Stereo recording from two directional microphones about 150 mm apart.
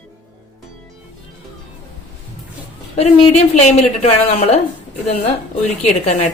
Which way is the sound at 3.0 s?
50° left (ahead or behind).